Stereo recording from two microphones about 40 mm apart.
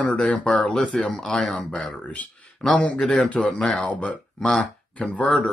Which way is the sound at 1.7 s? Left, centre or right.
Left.